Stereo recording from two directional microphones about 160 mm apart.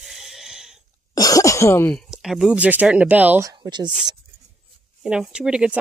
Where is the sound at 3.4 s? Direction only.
25° right (ahead or behind).